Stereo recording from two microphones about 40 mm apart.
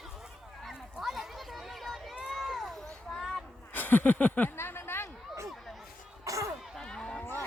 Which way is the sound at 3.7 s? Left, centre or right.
Left.